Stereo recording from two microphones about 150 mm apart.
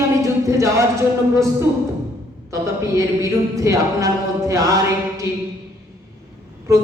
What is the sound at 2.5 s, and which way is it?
A capella, 20° right (ahead or behind).